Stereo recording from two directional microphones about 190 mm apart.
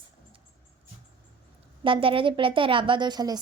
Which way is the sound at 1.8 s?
25° right (ahead or behind).